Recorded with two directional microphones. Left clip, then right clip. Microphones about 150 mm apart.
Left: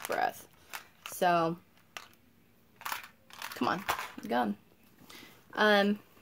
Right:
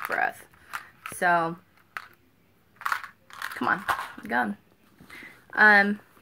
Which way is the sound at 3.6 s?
40° left (ahead or behind).